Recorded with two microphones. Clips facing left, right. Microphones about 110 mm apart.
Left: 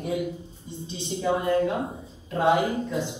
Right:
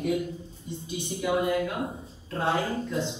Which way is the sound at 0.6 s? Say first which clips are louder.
Right 1 dB; 25° left (ahead or behind).